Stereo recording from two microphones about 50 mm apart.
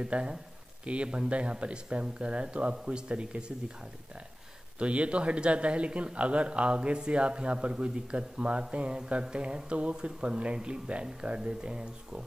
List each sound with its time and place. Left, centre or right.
0.0 s speech: right
4.7 s speech: right